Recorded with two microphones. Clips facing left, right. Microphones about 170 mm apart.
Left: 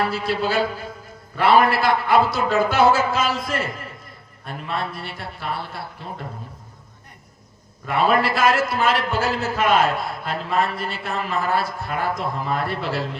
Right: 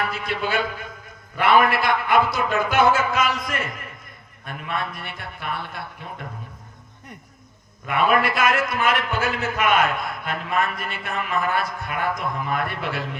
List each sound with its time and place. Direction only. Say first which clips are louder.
0.0 s a man's voice: left 4 dB; 30° left (ahead or behind)
7.9 s a man's voice: left 1 dB; 30° left (ahead or behind)